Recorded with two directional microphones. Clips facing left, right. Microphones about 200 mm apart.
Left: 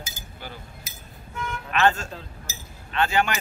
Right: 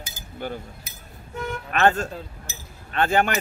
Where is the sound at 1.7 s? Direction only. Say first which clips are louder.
Right 2 dB; 50° right (ahead or behind).